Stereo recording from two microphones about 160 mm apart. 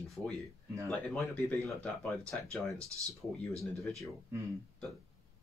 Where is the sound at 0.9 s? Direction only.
5° left (ahead or behind).